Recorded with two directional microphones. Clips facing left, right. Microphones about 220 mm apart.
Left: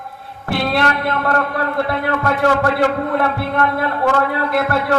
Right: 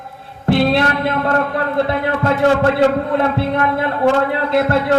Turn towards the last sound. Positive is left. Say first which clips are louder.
# right 3 dB
turn(degrees=-25)  # may be behind; listen again after turning